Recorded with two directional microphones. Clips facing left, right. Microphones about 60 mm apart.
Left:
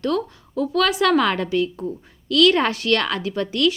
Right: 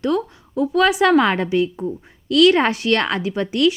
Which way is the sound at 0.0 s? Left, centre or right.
Right.